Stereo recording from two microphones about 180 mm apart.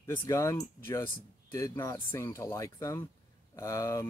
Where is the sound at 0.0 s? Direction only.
15° left (ahead or behind).